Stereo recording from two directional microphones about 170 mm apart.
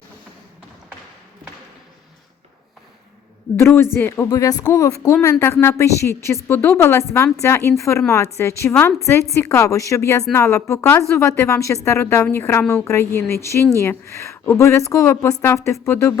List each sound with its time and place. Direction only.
3.6 s a woman's voice: 15° left (ahead or behind)
8.7 s a woman's voice: 5° left (ahead or behind)
9.0 s a woman's voice: 15° left (ahead or behind)